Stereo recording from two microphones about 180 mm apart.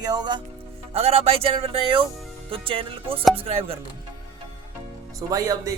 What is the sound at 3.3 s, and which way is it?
Music, 30° right (ahead or behind).